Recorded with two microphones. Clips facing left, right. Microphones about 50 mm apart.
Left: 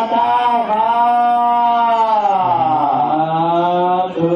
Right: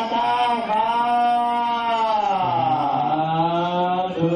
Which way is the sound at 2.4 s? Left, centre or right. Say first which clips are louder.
Left 6 dB; centre.